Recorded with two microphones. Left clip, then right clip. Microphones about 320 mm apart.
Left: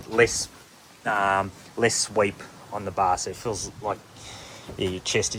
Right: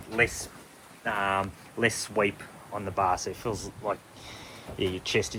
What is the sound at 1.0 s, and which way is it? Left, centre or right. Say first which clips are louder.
Speech: left 5 dB; centre.